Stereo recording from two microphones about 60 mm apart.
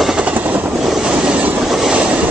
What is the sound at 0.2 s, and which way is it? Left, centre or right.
Vehicle, right.